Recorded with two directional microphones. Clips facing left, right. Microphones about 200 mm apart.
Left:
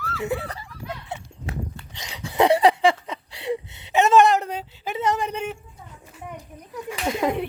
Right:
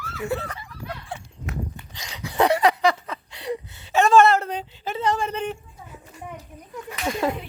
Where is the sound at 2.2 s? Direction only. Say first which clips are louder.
Left 2 dB; 25° left (ahead or behind); by 5.6 s 10° left (ahead or behind).